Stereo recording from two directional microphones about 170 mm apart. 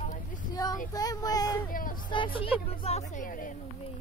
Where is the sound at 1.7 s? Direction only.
55° left (ahead or behind).